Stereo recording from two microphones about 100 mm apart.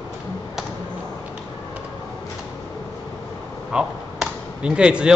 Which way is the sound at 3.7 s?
10° right (ahead or behind).